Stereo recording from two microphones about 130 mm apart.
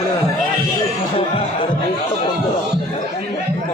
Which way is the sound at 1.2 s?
45° left (ahead or behind).